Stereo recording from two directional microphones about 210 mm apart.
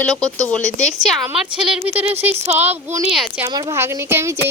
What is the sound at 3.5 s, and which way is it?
Speech, 20° right (ahead or behind).